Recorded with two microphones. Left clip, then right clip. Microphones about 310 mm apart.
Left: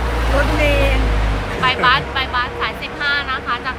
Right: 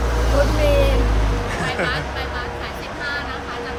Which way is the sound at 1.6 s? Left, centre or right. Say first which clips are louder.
Left 10 dB; centre.